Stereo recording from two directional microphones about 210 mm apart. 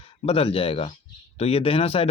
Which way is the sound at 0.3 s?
25° left (ahead or behind).